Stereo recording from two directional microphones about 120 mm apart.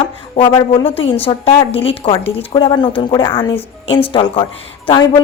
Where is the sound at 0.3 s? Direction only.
40° left (ahead or behind).